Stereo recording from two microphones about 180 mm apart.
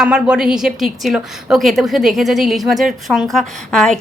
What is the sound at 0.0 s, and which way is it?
A woman's voice, 5° right (ahead or behind).